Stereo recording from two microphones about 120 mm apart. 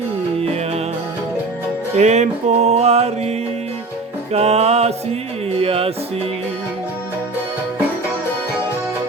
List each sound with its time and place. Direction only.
2.0 s music: 75° right (ahead or behind); by 5.9 s 55° right (ahead or behind)